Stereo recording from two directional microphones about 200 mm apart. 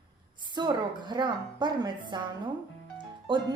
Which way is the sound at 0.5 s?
20° right (ahead or behind).